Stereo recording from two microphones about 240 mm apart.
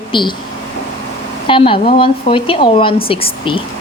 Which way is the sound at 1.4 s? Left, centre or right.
Left.